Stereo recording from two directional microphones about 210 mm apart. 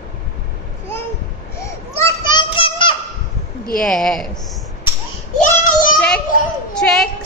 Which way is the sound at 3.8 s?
Centre (ahead or behind).